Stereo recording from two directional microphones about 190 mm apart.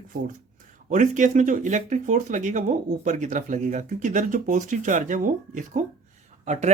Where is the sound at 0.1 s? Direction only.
45° right (ahead or behind).